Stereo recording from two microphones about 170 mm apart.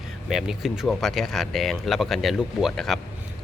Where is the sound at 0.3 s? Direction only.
Centre (ahead or behind).